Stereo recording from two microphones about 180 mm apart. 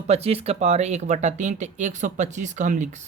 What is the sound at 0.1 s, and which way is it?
Speech, 35° right (ahead or behind).